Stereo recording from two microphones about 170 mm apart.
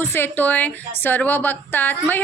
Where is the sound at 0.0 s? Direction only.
15° left (ahead or behind).